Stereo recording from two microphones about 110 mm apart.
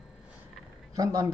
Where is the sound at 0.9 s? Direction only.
30° right (ahead or behind).